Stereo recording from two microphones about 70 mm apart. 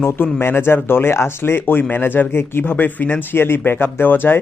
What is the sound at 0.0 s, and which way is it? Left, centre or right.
Speech, left.